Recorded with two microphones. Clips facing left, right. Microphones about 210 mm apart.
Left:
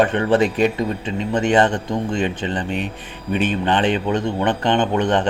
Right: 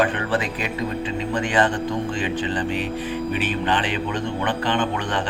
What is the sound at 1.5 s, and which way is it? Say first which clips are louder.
Speech: left 5 dB; 25° left (ahead or behind).